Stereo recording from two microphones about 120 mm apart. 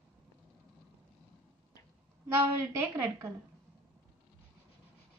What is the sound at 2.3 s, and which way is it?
A woman's voice, 20° right (ahead or behind).